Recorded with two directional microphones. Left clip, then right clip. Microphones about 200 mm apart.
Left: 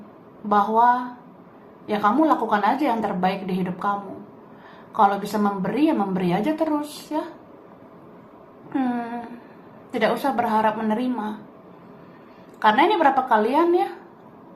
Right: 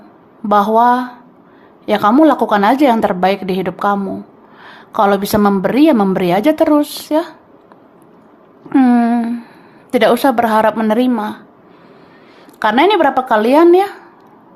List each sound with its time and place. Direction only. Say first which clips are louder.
0.4 s a woman's voice: right 7 dB; 50° right (ahead or behind)
8.7 s a sound: right 14 dB; 50° right (ahead or behind)
9.9 s a woman's voice: right 11 dB; 55° right (ahead or behind)
12.5 s a woman's voice: right 6 dB; 55° right (ahead or behind)